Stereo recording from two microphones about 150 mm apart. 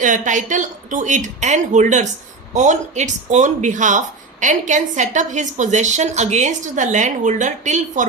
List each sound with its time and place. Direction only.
0.0 s speech: 55° right (ahead or behind)